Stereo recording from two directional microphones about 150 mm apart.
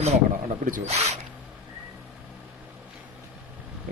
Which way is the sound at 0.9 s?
45° right (ahead or behind).